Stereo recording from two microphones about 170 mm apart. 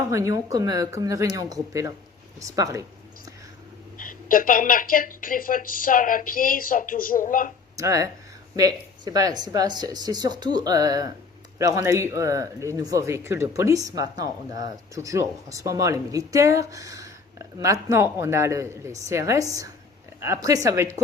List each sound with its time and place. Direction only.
0.1 s speech: 20° right (ahead or behind)
3.9 s speech: 55° left (ahead or behind)
7.8 s speech: 20° right (ahead or behind)